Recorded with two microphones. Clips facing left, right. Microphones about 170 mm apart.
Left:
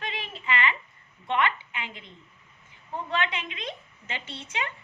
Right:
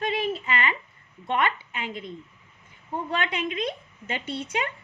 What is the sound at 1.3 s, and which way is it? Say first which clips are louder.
Speech: right 1 dB; 40° right (ahead or behind).